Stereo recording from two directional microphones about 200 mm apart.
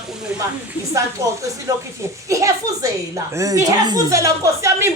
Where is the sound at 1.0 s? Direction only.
15° right (ahead or behind).